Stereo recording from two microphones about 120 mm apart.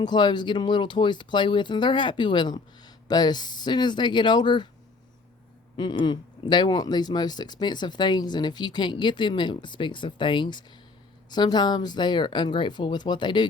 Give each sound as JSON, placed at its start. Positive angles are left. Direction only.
{"t": 0.0, "sound": "speech", "side_deg": 40}
{"t": 5.7, "sound": "speech", "side_deg": 40}